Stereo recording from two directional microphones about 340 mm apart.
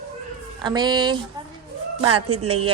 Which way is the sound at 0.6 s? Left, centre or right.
Centre.